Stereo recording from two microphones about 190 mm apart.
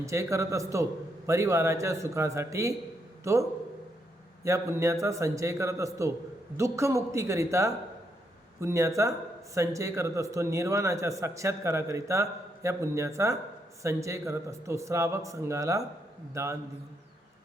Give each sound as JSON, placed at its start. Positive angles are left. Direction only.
{"t": 0.0, "sound": "a man's voice", "side_deg": -15}
{"t": 4.4, "sound": "a man's voice", "side_deg": -15}